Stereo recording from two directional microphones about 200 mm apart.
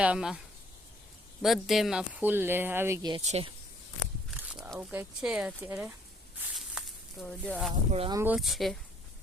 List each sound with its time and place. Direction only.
0.0 s speech: 5° right (ahead or behind)
1.4 s speech: centre (ahead or behind); by 3.2 s 15° right (ahead or behind)
3.2 s speech: 30° right (ahead or behind)
4.5 s speech: 5° right (ahead or behind)
6.8 s a sound: 5° right (ahead or behind)
7.2 s speech: 5° left (ahead or behind)
7.9 s speech: 30° right (ahead or behind)
8.1 s speech: 10° right (ahead or behind)
8.4 s speech: centre (ahead or behind)